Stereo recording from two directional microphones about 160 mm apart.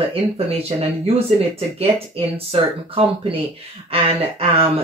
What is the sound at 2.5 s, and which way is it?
Speech, 35° right (ahead or behind).